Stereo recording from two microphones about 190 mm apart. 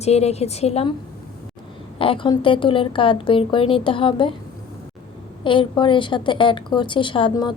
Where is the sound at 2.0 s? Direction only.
25° left (ahead or behind).